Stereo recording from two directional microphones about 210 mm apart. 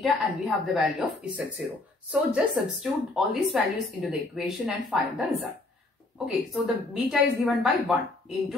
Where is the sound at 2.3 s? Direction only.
Centre (ahead or behind).